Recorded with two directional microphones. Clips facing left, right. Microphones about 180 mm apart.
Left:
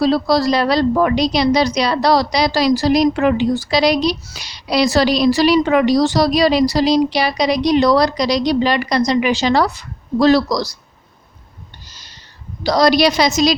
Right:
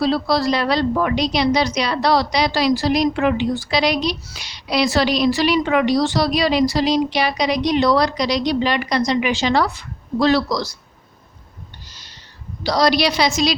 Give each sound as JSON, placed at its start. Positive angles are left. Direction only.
{"t": 0.0, "sound": "a woman's voice", "side_deg": 40}
{"t": 11.9, "sound": "a sound", "side_deg": 45}
{"t": 12.6, "sound": "a woman's voice", "side_deg": 45}